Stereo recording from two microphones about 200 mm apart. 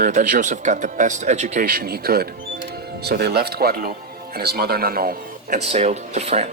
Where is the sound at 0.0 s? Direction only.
40° right (ahead or behind).